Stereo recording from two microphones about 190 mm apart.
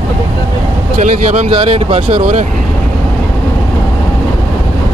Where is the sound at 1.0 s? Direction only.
40° right (ahead or behind).